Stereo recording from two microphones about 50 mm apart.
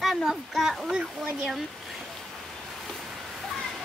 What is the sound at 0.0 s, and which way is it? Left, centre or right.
Speech, centre.